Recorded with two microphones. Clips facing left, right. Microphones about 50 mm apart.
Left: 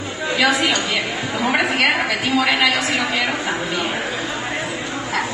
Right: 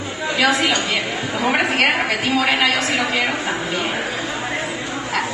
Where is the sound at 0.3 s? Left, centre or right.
Centre.